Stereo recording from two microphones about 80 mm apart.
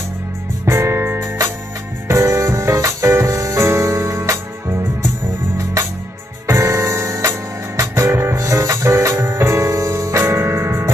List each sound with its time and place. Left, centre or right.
0.7 s music: right
6.4 s music: right